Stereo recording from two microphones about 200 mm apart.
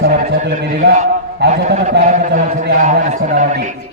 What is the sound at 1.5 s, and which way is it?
A man's voice, 35° right (ahead or behind).